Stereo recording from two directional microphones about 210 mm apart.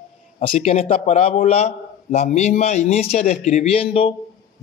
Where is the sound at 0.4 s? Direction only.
25° left (ahead or behind).